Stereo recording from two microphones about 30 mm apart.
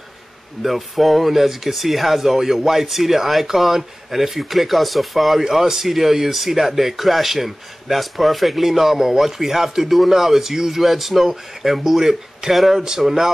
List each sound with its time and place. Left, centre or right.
0.6 s speech: centre
5.4 s speech: centre